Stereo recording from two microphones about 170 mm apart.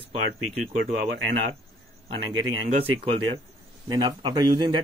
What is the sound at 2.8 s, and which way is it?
Speech, 35° right (ahead or behind).